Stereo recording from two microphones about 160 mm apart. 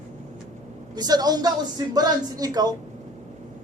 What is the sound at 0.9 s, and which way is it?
A man's voice, 25° right (ahead or behind).